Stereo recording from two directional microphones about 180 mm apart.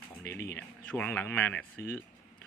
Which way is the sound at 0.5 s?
10° left (ahead or behind).